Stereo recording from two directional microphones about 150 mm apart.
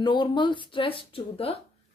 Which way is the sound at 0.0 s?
30° left (ahead or behind).